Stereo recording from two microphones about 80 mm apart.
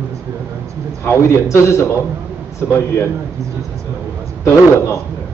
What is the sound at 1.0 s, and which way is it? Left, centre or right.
Speech, left.